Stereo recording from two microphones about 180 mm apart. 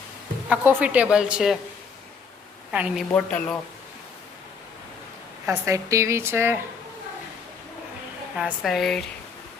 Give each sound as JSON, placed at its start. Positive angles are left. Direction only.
{"t": 0.5, "sound": "a woman's voice", "side_deg": -10}
{"t": 2.7, "sound": "a woman's voice", "side_deg": -5}
{"t": 3.1, "sound": "speech", "side_deg": 10}
{"t": 5.5, "sound": "a woman's voice", "side_deg": -15}
{"t": 8.4, "sound": "a woman's voice", "side_deg": 0}